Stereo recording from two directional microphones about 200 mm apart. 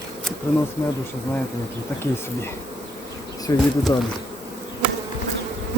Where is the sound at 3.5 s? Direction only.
15° left (ahead or behind).